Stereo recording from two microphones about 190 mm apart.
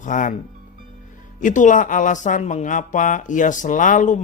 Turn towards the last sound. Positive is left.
turn(degrees=40)  # may be behind; listen again after turning